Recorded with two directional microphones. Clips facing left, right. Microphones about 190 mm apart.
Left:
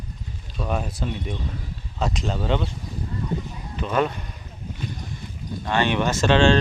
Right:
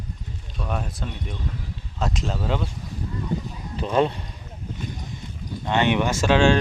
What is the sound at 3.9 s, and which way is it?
Speech, 30° right (ahead or behind).